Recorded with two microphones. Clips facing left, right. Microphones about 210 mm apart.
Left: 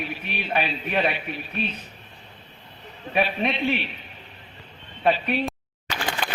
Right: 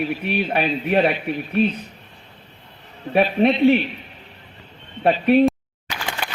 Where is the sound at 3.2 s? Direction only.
50° right (ahead or behind).